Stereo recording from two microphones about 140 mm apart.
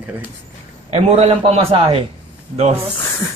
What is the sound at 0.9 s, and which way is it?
Speech, 45° right (ahead or behind).